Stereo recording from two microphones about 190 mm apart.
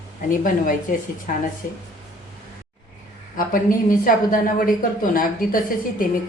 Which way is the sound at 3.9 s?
45° left (ahead or behind).